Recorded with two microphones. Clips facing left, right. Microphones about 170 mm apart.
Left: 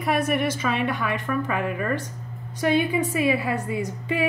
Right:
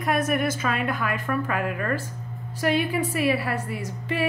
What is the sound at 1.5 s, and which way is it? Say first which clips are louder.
A woman's voice: left 1 dB; 10° left (ahead or behind).